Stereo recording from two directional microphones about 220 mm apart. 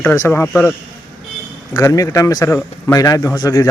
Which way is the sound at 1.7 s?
15° left (ahead or behind).